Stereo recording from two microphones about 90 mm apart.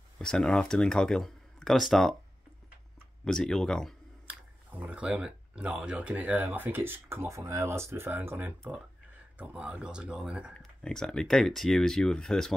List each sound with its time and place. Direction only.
0.2 s speech: 10° left (ahead or behind)
3.3 s speech: 5° left (ahead or behind)
4.3 s speech: 15° right (ahead or behind)
10.6 s speech: 5° left (ahead or behind)